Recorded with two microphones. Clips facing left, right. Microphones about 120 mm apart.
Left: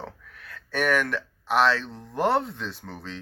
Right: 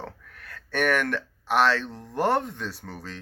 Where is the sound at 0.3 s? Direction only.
45° right (ahead or behind).